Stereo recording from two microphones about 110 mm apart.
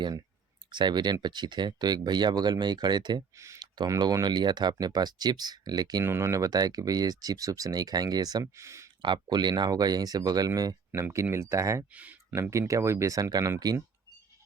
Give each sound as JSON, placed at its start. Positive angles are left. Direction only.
{"t": 0.7, "sound": "speech", "side_deg": -45}
{"t": 3.3, "sound": "speech", "side_deg": -25}
{"t": 3.6, "sound": "speech", "side_deg": -35}
{"t": 6.1, "sound": "speech", "side_deg": -25}
{"t": 9.0, "sound": "speech", "side_deg": -45}
{"t": 11.9, "sound": "speech", "side_deg": -15}
{"t": 12.3, "sound": "speech", "side_deg": -25}